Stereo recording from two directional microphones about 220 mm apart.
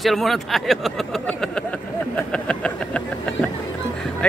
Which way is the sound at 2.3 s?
5° left (ahead or behind).